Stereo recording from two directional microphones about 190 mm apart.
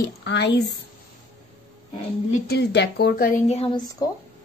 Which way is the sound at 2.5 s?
60° left (ahead or behind).